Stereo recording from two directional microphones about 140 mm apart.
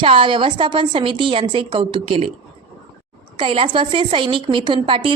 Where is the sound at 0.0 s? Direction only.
35° right (ahead or behind).